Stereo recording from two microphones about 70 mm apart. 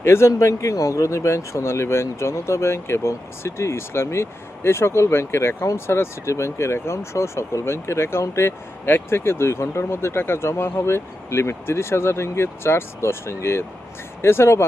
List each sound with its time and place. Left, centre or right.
0.0 s speech: left